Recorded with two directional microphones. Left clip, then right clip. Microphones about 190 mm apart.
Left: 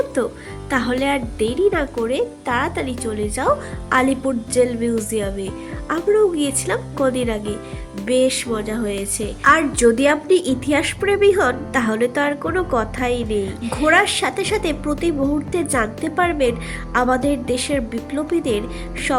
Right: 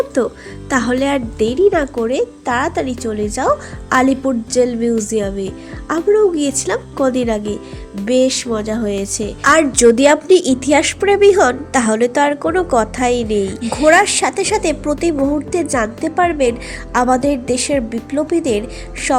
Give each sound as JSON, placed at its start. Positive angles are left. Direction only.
{"t": 0.2, "sound": "a woman's voice", "side_deg": -20}